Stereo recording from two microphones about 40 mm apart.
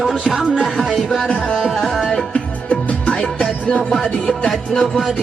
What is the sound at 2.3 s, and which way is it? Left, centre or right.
Music, left.